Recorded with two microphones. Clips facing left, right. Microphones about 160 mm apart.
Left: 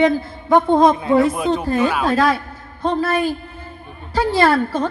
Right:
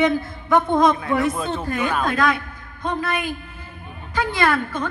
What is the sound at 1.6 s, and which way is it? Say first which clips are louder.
A woman's voice: left 5 dB; 30° left (ahead or behind).